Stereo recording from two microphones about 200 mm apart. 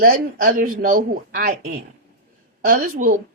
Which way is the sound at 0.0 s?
45° right (ahead or behind).